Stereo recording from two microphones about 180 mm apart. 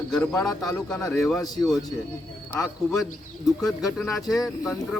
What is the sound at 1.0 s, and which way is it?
Speech, 15° left (ahead or behind).